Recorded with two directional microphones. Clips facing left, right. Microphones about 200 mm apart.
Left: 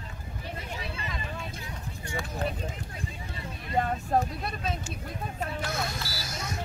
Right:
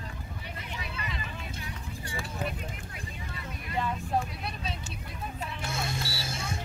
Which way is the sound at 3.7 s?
50° left (ahead or behind).